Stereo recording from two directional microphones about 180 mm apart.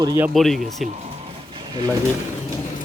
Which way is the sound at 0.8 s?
35° right (ahead or behind).